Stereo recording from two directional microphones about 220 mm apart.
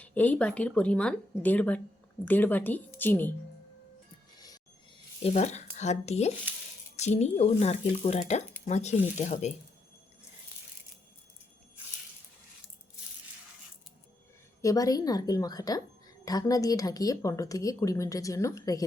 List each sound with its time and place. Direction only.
0.0 s a woman's voice: 5° left (ahead or behind)
5.2 s speech: 30° left (ahead or behind)
14.6 s a woman's voice: 15° left (ahead or behind)